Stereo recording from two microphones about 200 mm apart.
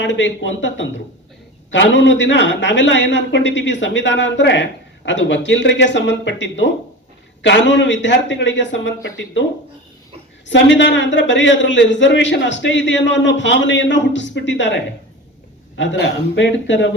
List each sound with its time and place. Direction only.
0.0 s a man's voice: 65° left (ahead or behind)
10.5 s a man's voice: 65° left (ahead or behind)
15.8 s a man's voice: 60° left (ahead or behind)